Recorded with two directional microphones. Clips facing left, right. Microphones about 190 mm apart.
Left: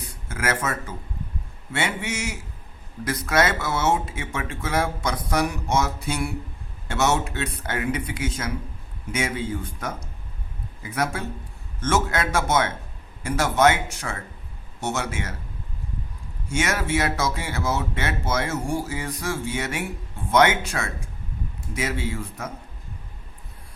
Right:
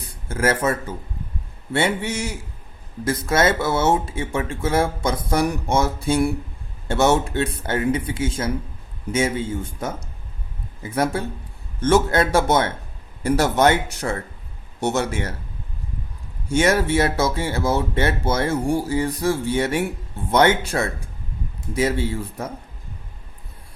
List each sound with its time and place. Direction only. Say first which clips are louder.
0.3 s speech: right 6 dB; 30° right (ahead or behind)
16.5 s speech: right 6 dB; 35° right (ahead or behind)